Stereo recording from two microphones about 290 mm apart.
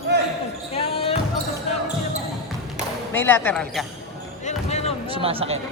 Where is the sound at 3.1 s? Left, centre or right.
Centre.